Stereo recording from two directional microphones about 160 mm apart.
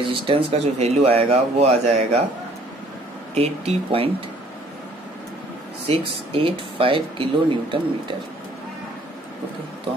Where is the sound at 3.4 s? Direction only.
40° right (ahead or behind).